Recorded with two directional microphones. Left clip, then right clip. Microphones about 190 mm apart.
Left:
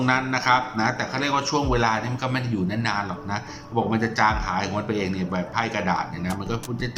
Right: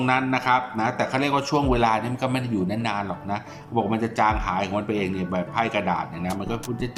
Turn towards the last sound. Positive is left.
turn(degrees=-15)  # may be behind; listen again after turning